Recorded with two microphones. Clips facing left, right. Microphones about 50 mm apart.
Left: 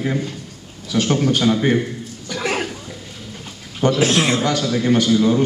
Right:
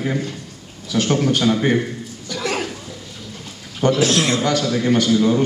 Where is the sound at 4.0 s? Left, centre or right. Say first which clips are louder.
Left 3 dB; centre.